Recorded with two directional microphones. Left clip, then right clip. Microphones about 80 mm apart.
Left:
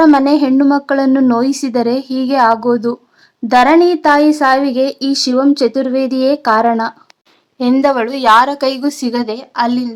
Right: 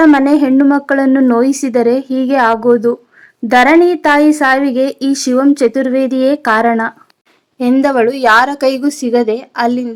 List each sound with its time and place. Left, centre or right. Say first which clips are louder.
0.0 s a woman's voice: right 1 dB; right
5.3 s a woman's voice: right 2 dB; right; by 9.8 s centre